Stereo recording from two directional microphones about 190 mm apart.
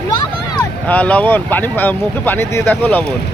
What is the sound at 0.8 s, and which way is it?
Speech, 10° left (ahead or behind).